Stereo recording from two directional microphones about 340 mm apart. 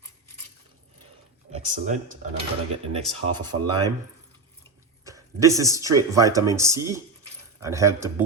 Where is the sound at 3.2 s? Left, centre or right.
Right.